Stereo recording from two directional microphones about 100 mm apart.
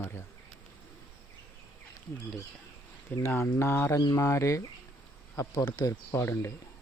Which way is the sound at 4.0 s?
35° left (ahead or behind).